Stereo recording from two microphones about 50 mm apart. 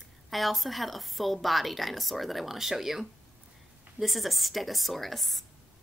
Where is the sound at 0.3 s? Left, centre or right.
Centre.